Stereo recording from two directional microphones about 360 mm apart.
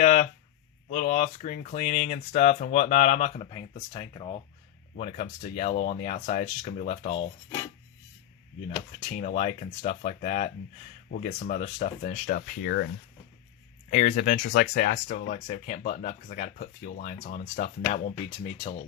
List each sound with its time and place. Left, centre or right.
0.0 s a sound: left
0.9 s speech: left
8.7 s speech: left
13.9 s speech: centre